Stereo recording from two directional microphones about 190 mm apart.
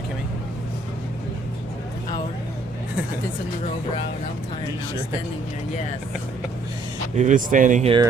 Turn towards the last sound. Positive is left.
turn(degrees=-40)  # may be behind; listen again after turning